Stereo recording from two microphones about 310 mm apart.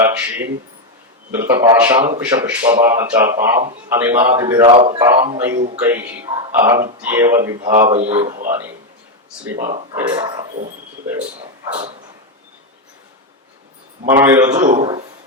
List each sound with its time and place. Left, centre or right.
0.0 s speech: centre
5.5 s a man's voice: right
5.8 s speech: centre
8.2 s a man's voice: right
9.6 s a man's voice: right
9.9 s speech: centre
11.7 s speech: centre
14.1 s a man's voice: centre